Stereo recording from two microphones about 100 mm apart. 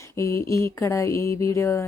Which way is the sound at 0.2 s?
30° left (ahead or behind).